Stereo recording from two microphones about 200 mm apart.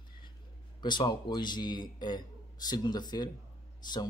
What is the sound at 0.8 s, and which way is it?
A man's voice, 20° left (ahead or behind).